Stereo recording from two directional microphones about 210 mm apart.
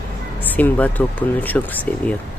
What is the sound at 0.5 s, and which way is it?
Speech, 10° left (ahead or behind).